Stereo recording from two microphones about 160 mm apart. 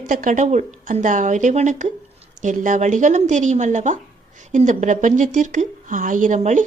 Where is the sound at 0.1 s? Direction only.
55° right (ahead or behind).